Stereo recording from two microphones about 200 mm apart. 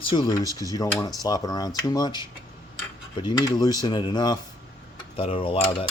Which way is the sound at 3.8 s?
20° left (ahead or behind).